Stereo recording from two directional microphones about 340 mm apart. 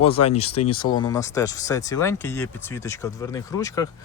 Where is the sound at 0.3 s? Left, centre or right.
Centre.